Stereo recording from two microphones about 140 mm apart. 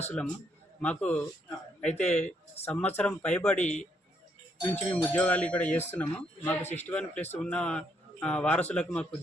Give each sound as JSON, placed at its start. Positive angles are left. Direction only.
{"t": 0.0, "sound": "speech", "side_deg": 15}
{"t": 6.6, "sound": "a man's voice", "side_deg": 55}
{"t": 6.8, "sound": "speech", "side_deg": 10}